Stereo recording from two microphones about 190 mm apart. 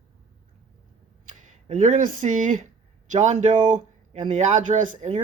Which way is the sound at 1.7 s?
40° right (ahead or behind).